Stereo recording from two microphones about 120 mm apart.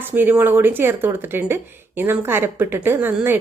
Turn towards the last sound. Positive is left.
turn(degrees=-15)  # may be behind; listen again after turning